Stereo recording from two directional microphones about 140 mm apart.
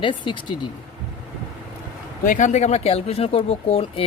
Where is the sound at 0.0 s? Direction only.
35° left (ahead or behind).